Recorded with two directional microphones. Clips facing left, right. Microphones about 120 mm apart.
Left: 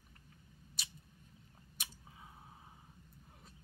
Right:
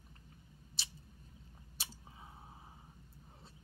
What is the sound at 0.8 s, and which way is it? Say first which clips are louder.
Scissors: even; 30° right (ahead or behind).